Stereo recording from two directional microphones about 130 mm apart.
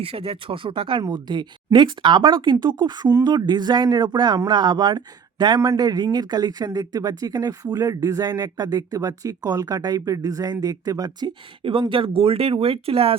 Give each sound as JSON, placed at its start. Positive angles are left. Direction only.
{"t": 0.0, "sound": "speech", "side_deg": -50}